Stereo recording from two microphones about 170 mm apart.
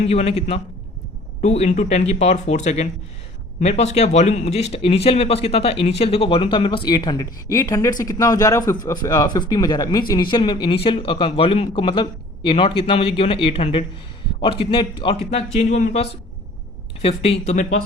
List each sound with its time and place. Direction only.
0.1 s speech: 35° left (ahead or behind)